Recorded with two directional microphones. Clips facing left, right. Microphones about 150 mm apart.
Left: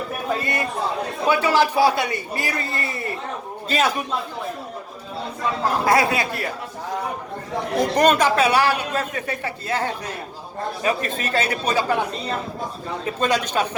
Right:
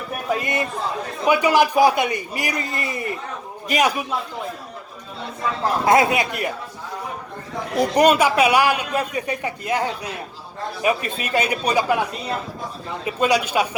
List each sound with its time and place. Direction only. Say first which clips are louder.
0.3 s a man's voice: right 1 dB; 20° right (ahead or behind)
5.8 s speech: right 3 dB; 20° right (ahead or behind)
7.8 s a man's voice: right 2 dB; 10° right (ahead or behind)